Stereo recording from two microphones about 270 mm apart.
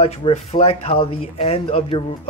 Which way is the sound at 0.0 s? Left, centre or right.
Left.